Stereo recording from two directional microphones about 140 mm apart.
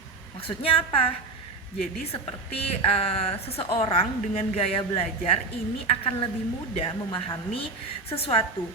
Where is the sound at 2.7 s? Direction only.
45° left (ahead or behind).